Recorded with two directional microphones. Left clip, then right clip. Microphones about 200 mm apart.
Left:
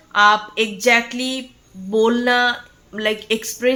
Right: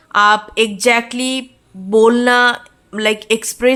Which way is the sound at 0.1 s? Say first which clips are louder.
Right 2 dB; 30° right (ahead or behind).